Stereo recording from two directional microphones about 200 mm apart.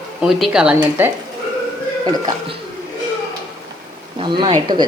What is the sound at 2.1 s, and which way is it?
Speech, 20° right (ahead or behind).